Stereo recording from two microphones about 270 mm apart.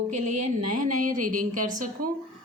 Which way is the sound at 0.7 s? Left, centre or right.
Right.